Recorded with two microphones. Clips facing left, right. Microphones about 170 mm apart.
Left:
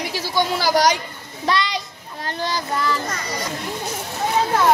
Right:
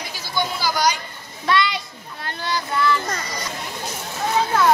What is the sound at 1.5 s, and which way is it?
Children playing, 35° left (ahead or behind).